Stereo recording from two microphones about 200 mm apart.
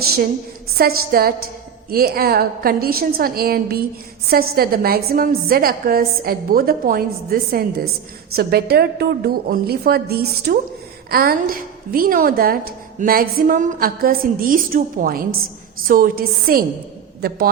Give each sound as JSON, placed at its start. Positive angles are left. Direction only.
{"t": 0.8, "sound": "a woman's voice", "side_deg": -50}